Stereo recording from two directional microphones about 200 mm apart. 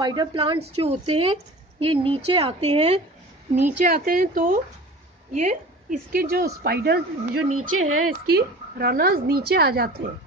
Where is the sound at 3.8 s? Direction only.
45° right (ahead or behind).